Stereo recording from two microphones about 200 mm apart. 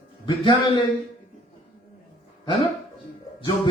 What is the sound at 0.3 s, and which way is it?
Speech, 25° left (ahead or behind).